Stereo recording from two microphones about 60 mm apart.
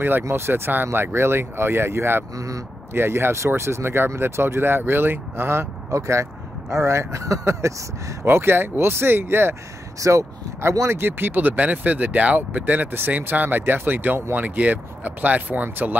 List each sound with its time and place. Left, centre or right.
0.3 s speech: right
2.3 s speech: right
2.9 s speech: right
5.9 s speech: right
8.3 s speech: right
9.9 s speech: right
10.6 s speech: right
11.0 s speech: right